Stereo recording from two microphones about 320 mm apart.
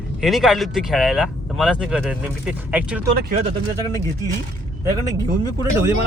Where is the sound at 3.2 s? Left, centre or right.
Right.